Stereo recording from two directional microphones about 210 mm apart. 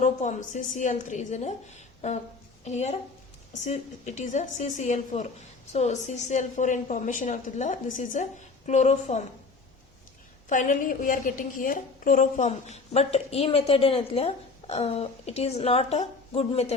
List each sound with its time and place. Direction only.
0.0 s a woman's voice: 35° left (ahead or behind)
2.6 s a woman's voice: 30° left (ahead or behind)
10.5 s a woman's voice: 40° left (ahead or behind)